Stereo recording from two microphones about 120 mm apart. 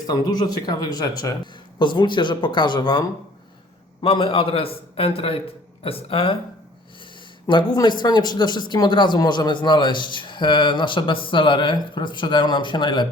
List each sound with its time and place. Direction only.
0.0 s a man's voice: 35° left (ahead or behind)